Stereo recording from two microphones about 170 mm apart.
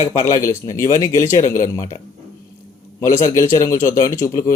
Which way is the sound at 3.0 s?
15° left (ahead or behind).